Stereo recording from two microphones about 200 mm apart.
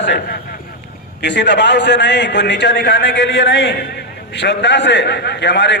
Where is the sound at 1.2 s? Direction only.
60° left (ahead or behind).